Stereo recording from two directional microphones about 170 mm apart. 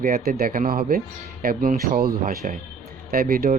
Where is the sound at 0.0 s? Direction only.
55° right (ahead or behind).